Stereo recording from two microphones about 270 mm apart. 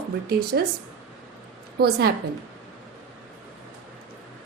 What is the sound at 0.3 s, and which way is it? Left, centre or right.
Speech, right.